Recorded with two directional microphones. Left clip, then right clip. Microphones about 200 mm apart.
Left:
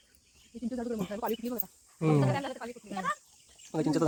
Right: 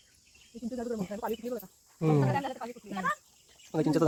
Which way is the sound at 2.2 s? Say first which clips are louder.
Right 1 dB; 30° left (ahead or behind).